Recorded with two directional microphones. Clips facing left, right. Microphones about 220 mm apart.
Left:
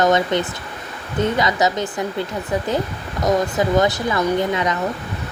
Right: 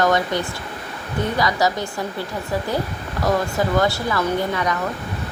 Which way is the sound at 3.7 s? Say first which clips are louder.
Left 2 dB; 20° left (ahead or behind).